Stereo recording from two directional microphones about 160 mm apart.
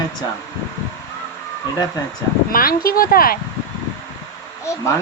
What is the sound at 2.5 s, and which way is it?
Speech, 65° left (ahead or behind).